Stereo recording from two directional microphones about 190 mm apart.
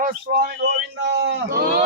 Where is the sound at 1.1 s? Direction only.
65° right (ahead or behind).